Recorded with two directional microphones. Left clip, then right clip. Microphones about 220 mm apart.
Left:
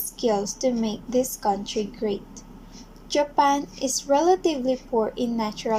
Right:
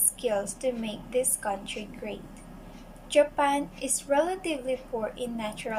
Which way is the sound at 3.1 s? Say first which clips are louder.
Left 3 dB; 35° left (ahead or behind).